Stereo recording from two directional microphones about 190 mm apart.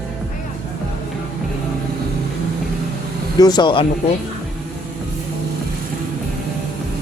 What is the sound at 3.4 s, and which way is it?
Speech, 20° left (ahead or behind).